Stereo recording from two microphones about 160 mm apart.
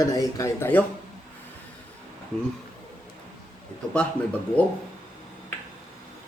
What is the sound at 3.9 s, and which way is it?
Speech, 10° left (ahead or behind).